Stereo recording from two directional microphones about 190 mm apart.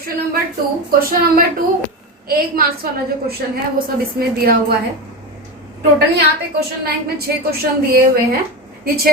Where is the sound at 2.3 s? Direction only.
50° right (ahead or behind).